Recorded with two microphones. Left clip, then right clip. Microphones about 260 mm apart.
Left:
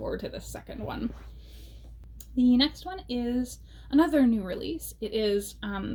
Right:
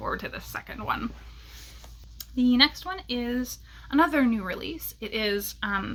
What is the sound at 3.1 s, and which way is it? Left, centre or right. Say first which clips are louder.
Speech: left 1 dB; centre.